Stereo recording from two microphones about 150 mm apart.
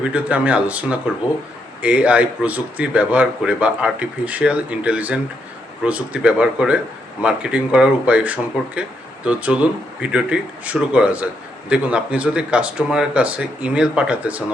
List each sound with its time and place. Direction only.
0.0 s a man's voice: 10° right (ahead or behind)